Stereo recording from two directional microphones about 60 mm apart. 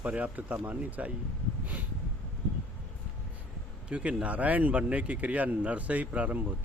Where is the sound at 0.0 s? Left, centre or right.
Right.